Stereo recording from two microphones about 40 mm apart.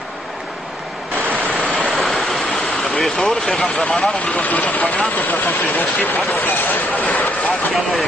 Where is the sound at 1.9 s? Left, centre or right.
Centre.